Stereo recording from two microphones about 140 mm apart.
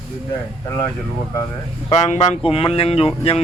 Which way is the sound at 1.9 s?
55° left (ahead or behind).